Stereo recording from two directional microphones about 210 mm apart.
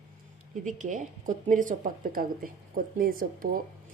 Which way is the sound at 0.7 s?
35° right (ahead or behind).